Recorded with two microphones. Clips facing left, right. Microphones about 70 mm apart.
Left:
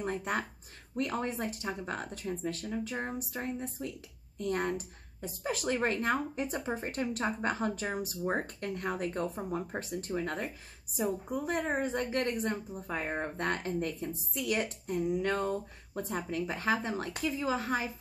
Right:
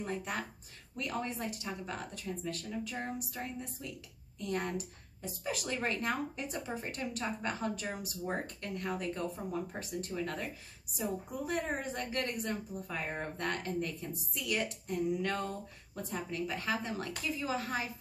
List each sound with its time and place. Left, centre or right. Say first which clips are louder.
0.0 s a woman's voice: left 4 dB; left